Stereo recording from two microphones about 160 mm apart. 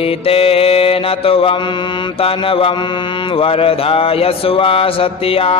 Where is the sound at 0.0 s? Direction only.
35° left (ahead or behind).